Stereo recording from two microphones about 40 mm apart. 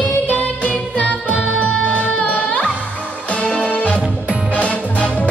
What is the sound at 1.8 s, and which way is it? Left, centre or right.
Music, left.